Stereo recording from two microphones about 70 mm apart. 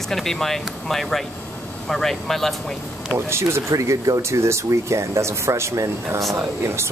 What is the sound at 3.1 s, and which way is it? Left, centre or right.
Speech, right.